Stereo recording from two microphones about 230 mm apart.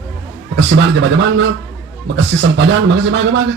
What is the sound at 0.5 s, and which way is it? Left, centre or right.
Speech, right.